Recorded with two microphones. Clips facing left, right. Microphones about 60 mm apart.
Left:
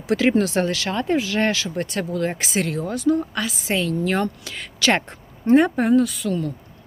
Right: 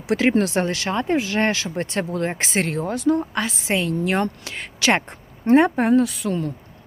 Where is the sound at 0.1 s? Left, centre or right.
Right.